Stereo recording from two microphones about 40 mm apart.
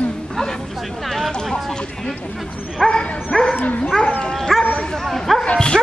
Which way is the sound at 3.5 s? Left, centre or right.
Left.